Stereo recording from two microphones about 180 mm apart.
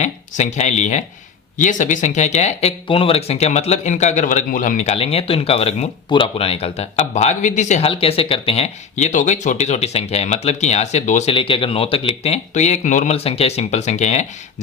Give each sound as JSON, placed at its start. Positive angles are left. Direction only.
{"t": 0.0, "sound": "speech", "side_deg": 40}